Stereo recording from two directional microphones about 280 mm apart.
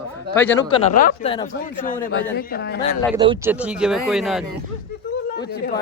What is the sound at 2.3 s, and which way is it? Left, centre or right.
Speech, left.